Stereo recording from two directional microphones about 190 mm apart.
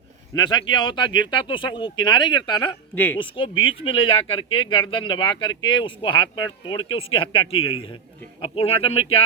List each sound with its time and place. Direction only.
0.3 s speech: 20° left (ahead or behind)
2.9 s speech: 10° left (ahead or behind)
3.2 s speech: 25° left (ahead or behind)